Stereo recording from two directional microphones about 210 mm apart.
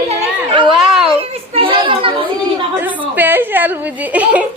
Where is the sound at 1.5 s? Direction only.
25° right (ahead or behind).